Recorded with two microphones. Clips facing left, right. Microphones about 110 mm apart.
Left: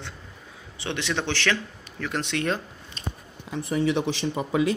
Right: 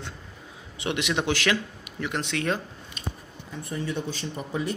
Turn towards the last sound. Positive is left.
turn(degrees=90)